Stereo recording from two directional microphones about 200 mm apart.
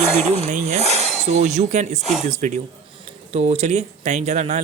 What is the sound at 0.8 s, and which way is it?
Speech, 35° left (ahead or behind).